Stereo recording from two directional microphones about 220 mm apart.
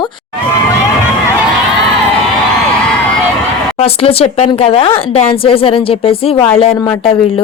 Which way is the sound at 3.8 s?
30° left (ahead or behind).